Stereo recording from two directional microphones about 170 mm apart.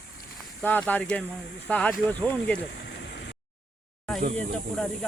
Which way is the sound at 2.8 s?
90° left.